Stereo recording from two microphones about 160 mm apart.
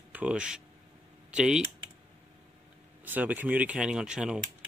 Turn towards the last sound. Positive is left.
turn(degrees=-5)  # may be behind; listen again after turning